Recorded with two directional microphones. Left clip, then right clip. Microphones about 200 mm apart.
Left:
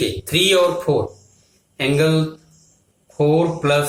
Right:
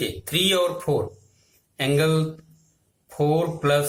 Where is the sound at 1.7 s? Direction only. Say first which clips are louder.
Left 4 dB; 25° right (ahead or behind).